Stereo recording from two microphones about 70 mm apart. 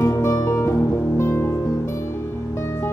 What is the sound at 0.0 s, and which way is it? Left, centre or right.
Music, left.